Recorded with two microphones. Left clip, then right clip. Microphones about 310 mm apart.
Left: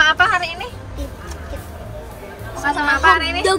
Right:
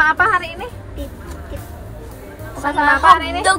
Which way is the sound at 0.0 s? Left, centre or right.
Centre.